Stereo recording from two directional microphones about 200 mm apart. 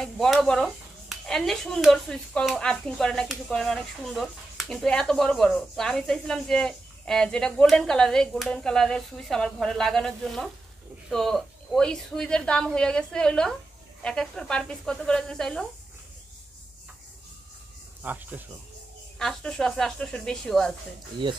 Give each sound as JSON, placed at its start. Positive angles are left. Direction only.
{"t": 0.0, "sound": "speech", "side_deg": 0}
{"t": 18.0, "sound": "speech", "side_deg": -10}
{"t": 19.1, "sound": "speech", "side_deg": 5}
{"t": 21.2, "sound": "speech", "side_deg": -25}